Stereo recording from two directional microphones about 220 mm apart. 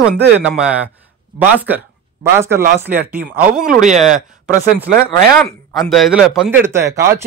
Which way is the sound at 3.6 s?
Centre (ahead or behind).